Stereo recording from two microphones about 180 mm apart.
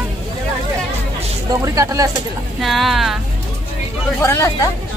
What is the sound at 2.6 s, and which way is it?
Speech, centre (ahead or behind).